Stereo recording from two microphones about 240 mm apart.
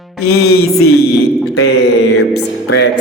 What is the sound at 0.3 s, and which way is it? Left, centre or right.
Speech, left.